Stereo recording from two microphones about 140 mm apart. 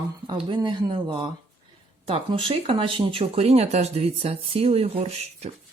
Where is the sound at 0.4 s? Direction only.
35° right (ahead or behind).